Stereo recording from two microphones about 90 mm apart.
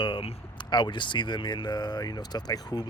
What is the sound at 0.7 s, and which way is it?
Speech, 60° left (ahead or behind).